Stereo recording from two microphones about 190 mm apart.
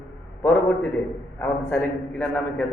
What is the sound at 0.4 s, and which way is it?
A man's voice, 10° left (ahead or behind).